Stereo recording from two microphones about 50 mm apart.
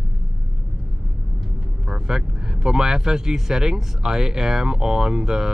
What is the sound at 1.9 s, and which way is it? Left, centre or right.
Speech, centre.